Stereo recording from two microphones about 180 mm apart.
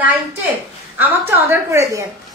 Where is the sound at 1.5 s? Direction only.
15° right (ahead or behind).